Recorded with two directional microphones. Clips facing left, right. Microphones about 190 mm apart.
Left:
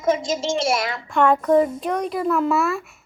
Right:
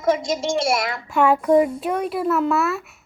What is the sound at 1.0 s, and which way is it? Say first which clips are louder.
A child's voice: even; 5° right (ahead or behind).